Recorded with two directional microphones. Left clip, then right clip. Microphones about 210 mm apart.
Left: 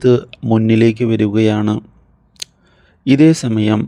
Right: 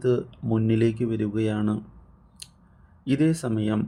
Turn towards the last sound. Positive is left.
turn(degrees=35)  # may be behind; listen again after turning